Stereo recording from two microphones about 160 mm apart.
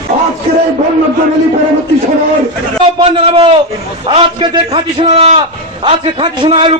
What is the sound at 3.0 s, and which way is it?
A man's voice, 35° right (ahead or behind).